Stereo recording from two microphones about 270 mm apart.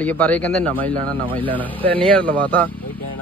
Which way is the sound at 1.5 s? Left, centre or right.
Centre.